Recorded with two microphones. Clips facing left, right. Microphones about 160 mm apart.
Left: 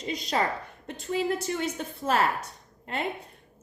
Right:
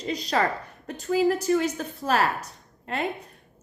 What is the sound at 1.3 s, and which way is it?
Speech, 30° left (ahead or behind).